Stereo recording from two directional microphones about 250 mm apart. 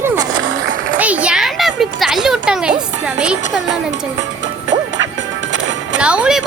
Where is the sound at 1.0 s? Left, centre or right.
Centre.